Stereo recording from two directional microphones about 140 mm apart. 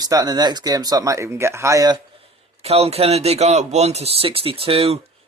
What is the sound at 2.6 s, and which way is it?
Speech, 45° right (ahead or behind).